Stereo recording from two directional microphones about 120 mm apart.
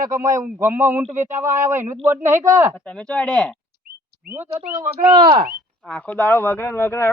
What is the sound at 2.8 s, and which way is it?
Speech, 10° left (ahead or behind).